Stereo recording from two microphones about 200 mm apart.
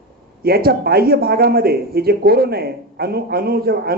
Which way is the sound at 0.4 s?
50° right (ahead or behind).